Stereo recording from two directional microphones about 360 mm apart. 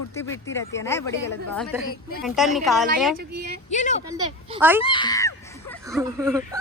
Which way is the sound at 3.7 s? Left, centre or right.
Centre.